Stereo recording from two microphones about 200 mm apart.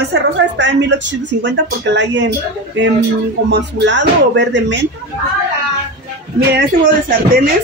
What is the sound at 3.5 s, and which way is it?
A woman's voice, 60° right (ahead or behind).